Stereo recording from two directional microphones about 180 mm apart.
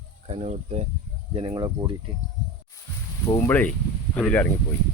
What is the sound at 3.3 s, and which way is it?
Speech, 10° left (ahead or behind).